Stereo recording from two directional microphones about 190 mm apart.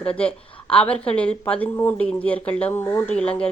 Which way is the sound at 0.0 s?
5° left (ahead or behind).